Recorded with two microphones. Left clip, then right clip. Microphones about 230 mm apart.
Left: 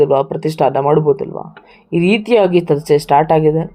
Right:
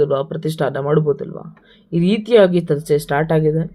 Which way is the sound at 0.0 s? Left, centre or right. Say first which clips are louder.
Left 5 dB; left.